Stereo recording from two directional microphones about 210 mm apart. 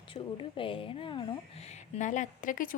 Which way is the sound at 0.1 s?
25° left (ahead or behind).